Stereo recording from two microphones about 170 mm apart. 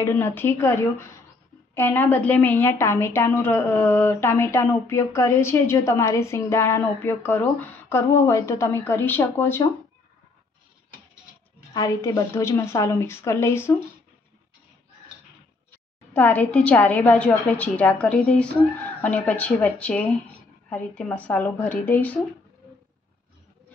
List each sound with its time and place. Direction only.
0.0 s a woman's voice: 15° left (ahead or behind)
11.7 s a woman's voice: 20° left (ahead or behind)
16.1 s a woman's voice: 10° left (ahead or behind)